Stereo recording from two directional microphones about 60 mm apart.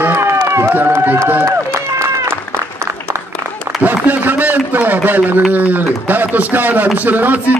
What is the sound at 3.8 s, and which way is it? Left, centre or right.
Speech, right.